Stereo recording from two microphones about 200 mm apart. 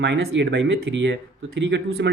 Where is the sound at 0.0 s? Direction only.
60° right (ahead or behind).